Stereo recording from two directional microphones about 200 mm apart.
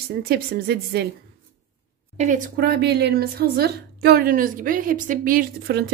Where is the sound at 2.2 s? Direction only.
40° right (ahead or behind).